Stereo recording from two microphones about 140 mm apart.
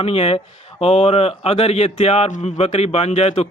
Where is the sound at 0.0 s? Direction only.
45° left (ahead or behind).